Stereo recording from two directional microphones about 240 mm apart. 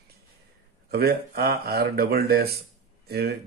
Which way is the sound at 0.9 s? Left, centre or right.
Right.